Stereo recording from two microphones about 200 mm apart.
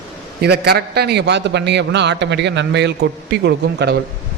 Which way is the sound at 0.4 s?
55° right (ahead or behind).